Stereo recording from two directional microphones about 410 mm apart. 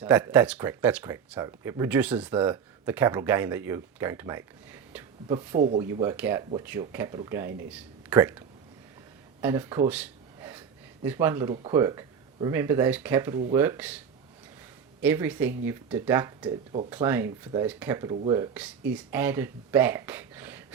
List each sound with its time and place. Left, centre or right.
0.0 s speech: centre
5.5 s speech: centre
5.8 s speech: centre
9.4 s a sound: centre
11.0 s speech: centre
15.0 s speech: centre